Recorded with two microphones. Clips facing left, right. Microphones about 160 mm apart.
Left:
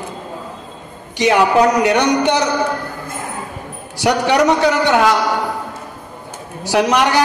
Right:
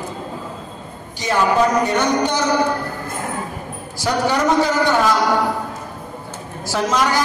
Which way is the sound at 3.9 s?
75° left (ahead or behind).